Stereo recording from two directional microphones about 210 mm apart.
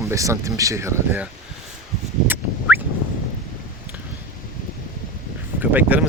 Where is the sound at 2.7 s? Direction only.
10° right (ahead or behind).